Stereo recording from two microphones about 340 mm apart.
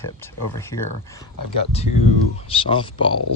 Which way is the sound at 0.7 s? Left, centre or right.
Left.